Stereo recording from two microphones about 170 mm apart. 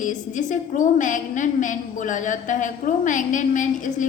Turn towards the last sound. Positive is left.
turn(degrees=50)  # may be behind; listen again after turning